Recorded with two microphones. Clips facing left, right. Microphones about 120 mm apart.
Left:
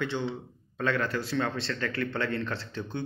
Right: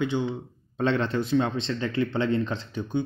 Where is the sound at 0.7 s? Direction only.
25° right (ahead or behind).